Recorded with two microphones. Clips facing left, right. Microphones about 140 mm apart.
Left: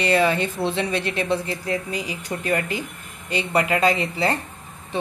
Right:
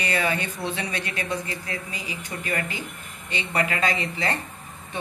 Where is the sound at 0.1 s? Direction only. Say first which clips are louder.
Left 6 dB; 30° left (ahead or behind).